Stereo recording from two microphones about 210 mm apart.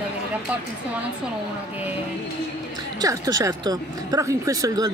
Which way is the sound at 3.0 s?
15° right (ahead or behind).